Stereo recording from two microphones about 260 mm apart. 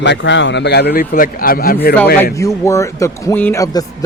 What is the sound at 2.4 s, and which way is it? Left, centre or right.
A man's voice, centre.